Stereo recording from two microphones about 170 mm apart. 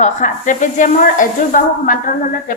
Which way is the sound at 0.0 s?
45° left (ahead or behind).